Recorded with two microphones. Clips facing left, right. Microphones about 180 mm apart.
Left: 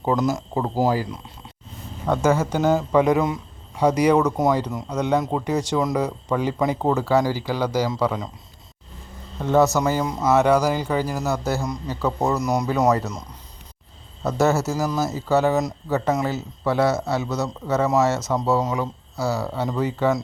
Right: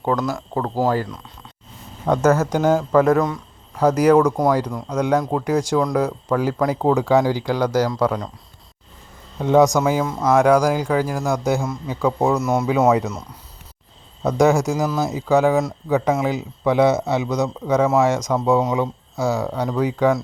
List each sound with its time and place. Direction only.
0.0 s speech: 15° left (ahead or behind)
2.5 s speech: 10° right (ahead or behind)
5.7 s speech: 5° left (ahead or behind)
7.3 s speech: 15° right (ahead or behind)
7.5 s speech: 10° left (ahead or behind)
9.6 s speech: 5° left (ahead or behind)
10.3 s speech: 10° right (ahead or behind)
11.1 s speech: 5° left (ahead or behind)
14.3 s speech: 15° right (ahead or behind)
14.8 s speech: centre (ahead or behind)
15.1 s speech: 10° right (ahead or behind)
15.4 s speech: centre (ahead or behind)
15.9 s speech: 15° right (ahead or behind)